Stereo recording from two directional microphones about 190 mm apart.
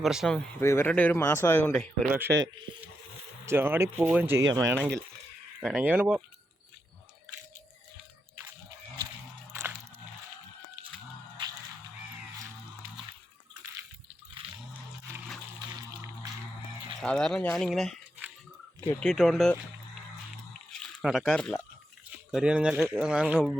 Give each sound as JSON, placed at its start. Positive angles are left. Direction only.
{"t": 0.0, "sound": "speech", "side_deg": 0}
{"t": 0.6, "sound": "speech", "side_deg": 15}
{"t": 2.0, "sound": "speech", "side_deg": -10}
{"t": 3.4, "sound": "speech", "side_deg": -10}
{"t": 9.5, "sound": "a sound", "side_deg": -10}
{"t": 15.7, "sound": "a sound", "side_deg": -20}
{"t": 17.0, "sound": "speech", "side_deg": 5}
{"t": 20.7, "sound": "a sound", "side_deg": 0}
{"t": 22.3, "sound": "speech", "side_deg": -5}